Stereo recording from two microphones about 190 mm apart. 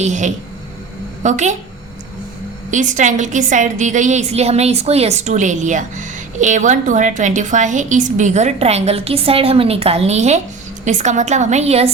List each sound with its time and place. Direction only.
0.0 s a woman's voice: 40° right (ahead or behind)
2.6 s a woman's voice: 40° right (ahead or behind)